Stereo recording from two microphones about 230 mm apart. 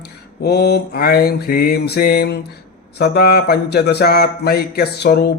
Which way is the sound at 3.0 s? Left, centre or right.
Left.